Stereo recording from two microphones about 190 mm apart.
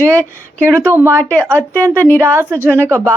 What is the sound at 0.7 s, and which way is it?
Speech, 10° right (ahead or behind).